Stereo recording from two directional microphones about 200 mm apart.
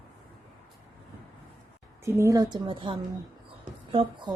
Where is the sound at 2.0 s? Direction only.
15° right (ahead or behind).